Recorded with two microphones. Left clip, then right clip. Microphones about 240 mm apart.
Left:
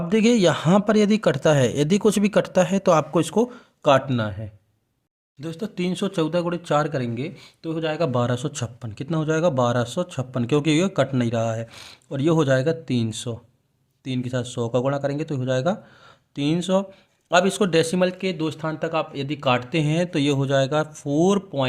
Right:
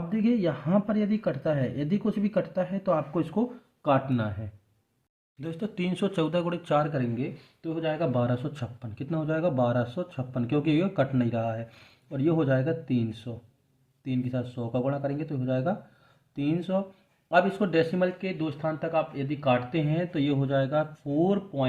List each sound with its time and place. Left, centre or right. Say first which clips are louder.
0.1 s a man's voice: left 10 dB; left
6.8 s a man's voice: left 4 dB; left